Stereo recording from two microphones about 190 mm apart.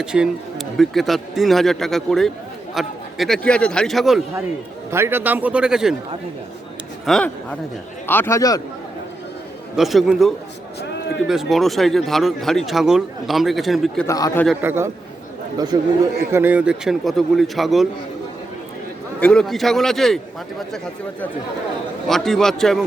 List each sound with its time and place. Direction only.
0.0 s speech: 5° right (ahead or behind)
4.9 s a man's voice: 15° right (ahead or behind)
7.0 s a man's voice: centre (ahead or behind); by 8.6 s 20° left (ahead or behind)
9.7 s speech: centre (ahead or behind)
14.1 s speech: 15° left (ahead or behind)
14.6 s a man's voice: 10° right (ahead or behind)
16.3 s speech: 10° right (ahead or behind)
19.2 s speech: 5° left (ahead or behind)
22.0 s speech: centre (ahead or behind)